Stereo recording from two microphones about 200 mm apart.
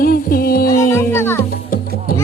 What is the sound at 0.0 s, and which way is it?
Music, 45° left (ahead or behind).